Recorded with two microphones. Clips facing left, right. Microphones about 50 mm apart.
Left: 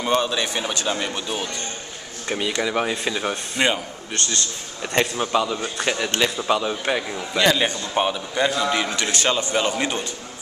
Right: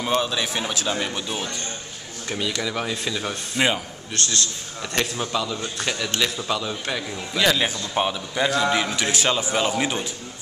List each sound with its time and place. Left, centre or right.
0.0 s a man's voice: centre
2.2 s speech: centre
3.5 s a man's voice: centre
7.3 s a man's voice: centre